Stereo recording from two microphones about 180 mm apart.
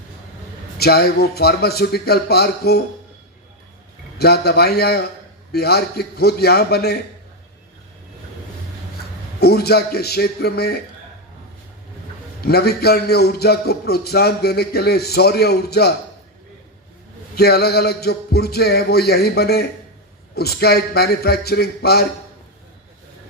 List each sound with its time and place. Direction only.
0.8 s a man's voice: 60° left (ahead or behind)
4.2 s a man's voice: 60° left (ahead or behind)
9.0 s a man's voice: 60° left (ahead or behind)
12.4 s a man's voice: 60° left (ahead or behind)
17.3 s a man's voice: 60° left (ahead or behind)